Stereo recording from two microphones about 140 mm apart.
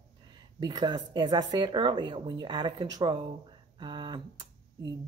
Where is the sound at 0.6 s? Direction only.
30° right (ahead or behind).